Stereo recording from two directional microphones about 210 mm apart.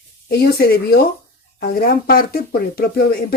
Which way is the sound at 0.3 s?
50° left (ahead or behind).